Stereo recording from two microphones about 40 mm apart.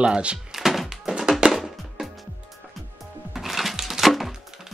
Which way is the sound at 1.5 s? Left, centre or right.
Centre.